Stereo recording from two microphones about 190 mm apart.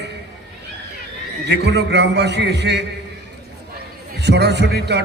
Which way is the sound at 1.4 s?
65° right (ahead or behind).